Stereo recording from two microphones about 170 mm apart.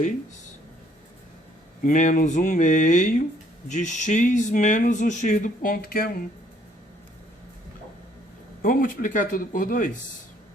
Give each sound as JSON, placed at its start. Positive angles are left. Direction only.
{"t": 1.8, "sound": "speech", "side_deg": 50}
{"t": 8.6, "sound": "speech", "side_deg": 55}